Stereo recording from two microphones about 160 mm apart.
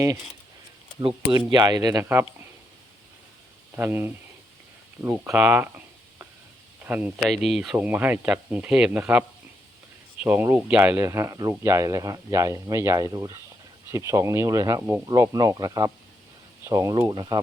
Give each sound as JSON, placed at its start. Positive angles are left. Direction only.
{"t": 1.5, "sound": "speech", "side_deg": -25}
{"t": 3.8, "sound": "speech", "side_deg": -15}
{"t": 5.3, "sound": "a sound", "side_deg": -10}
{"t": 6.8, "sound": "speech", "side_deg": -10}
{"t": 7.3, "sound": "speech", "side_deg": 0}
{"t": 7.8, "sound": "speech", "side_deg": -10}
{"t": 10.2, "sound": "speech", "side_deg": -10}